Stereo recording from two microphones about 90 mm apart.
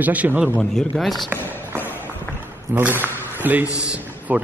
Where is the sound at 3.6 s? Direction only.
35° left (ahead or behind).